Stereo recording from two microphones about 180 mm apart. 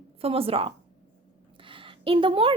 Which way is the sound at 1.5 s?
30° right (ahead or behind).